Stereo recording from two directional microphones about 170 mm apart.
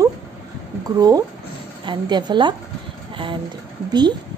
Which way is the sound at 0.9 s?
20° right (ahead or behind).